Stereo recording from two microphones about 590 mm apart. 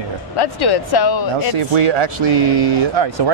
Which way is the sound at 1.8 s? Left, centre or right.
Right.